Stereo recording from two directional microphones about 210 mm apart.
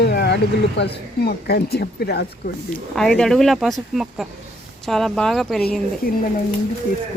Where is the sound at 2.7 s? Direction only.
5° left (ahead or behind).